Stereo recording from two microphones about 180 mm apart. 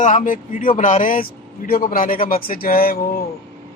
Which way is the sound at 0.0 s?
45° left (ahead or behind).